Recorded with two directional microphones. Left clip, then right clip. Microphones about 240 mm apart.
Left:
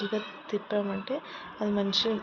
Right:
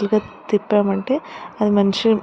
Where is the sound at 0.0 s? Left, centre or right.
Right.